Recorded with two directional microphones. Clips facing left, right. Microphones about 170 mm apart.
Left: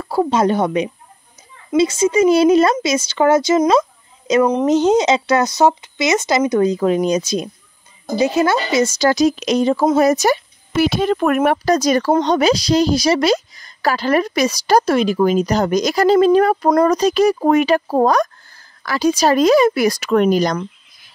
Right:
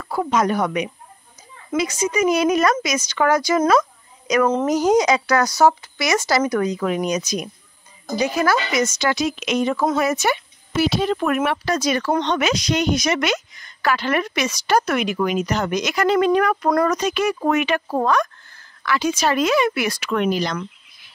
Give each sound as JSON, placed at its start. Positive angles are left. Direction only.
{"t": 0.0, "sound": "a woman's voice", "side_deg": 30}
{"t": 10.8, "sound": "speech", "side_deg": 50}
{"t": 16.7, "sound": "speech", "side_deg": 25}
{"t": 17.0, "sound": "speech", "side_deg": 35}